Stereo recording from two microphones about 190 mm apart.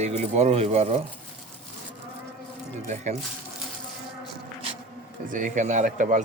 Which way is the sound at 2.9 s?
40° right (ahead or behind).